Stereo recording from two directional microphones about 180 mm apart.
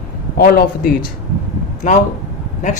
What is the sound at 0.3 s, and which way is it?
Speech, 55° left (ahead or behind).